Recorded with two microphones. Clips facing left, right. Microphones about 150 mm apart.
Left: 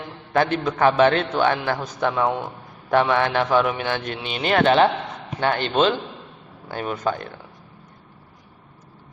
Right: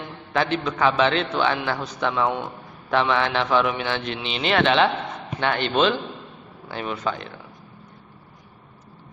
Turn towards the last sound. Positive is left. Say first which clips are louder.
# left 2 dB
turn(degrees=45)  # may be behind; listen again after turning